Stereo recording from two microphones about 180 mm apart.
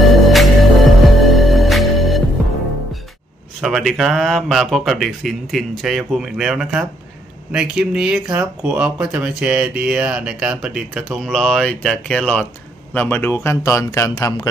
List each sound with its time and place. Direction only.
0.0 s music: centre (ahead or behind)
3.6 s a man's voice: centre (ahead or behind); by 14.5 s 20° left (ahead or behind)